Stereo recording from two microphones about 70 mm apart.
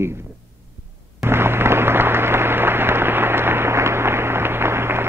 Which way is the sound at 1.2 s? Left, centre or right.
Right.